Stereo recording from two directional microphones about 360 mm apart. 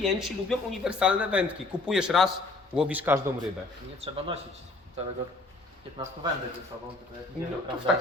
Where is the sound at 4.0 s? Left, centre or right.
Centre.